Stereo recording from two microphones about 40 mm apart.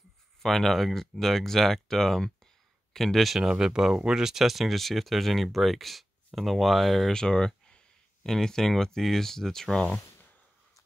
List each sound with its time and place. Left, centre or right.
0.4 s speech: centre
3.3 s speech: centre
7.1 s a sound: centre
8.3 s speech: centre